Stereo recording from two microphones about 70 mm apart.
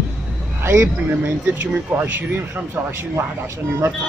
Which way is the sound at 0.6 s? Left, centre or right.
Right.